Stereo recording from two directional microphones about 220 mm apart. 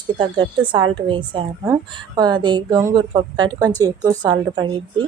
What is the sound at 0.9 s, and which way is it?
A woman's voice, 20° right (ahead or behind).